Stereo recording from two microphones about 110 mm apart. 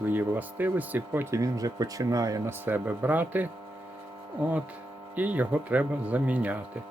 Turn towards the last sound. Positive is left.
turn(degrees=-15)  # may be behind; listen again after turning